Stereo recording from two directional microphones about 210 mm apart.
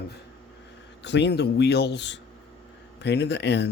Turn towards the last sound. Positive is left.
turn(degrees=55)  # may be behind; listen again after turning